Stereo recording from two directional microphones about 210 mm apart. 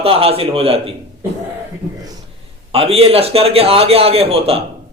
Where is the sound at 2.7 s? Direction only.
30° right (ahead or behind).